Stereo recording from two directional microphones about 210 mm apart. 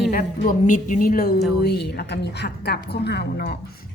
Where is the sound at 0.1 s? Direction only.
40° left (ahead or behind).